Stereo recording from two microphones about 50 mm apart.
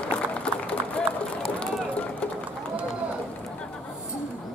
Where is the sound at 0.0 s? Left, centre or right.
Left.